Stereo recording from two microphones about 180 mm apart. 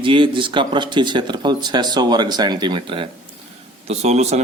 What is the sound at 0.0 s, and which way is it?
Speech, 30° right (ahead or behind).